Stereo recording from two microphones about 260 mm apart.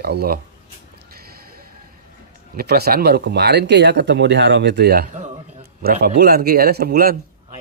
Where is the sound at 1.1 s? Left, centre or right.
Right.